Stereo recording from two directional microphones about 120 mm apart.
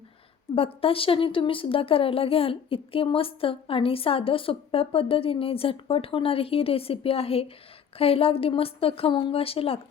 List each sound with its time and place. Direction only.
0.5 s a woman's voice: 50° left (ahead or behind)